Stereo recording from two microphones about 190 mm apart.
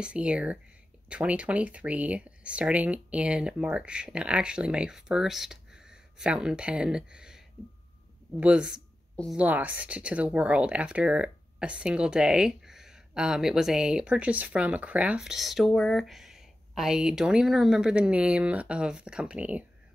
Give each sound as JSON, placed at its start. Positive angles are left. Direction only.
{"t": 0.0, "sound": "a woman's voice", "side_deg": -5}
{"t": 9.4, "sound": "speech", "side_deg": -10}